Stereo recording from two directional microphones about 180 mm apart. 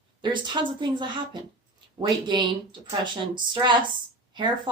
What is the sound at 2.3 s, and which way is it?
A woman's voice, 25° right (ahead or behind).